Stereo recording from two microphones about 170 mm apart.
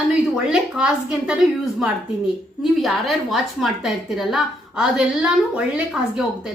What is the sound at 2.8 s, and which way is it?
A woman's voice, centre (ahead or behind).